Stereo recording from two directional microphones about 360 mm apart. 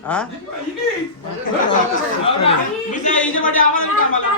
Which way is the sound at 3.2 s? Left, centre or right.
Left.